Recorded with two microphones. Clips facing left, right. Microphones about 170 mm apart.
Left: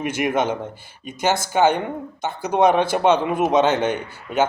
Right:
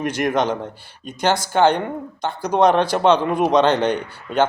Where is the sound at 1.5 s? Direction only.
10° left (ahead or behind).